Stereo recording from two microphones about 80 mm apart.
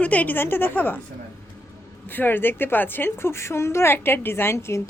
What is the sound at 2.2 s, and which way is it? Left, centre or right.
A woman's voice, left.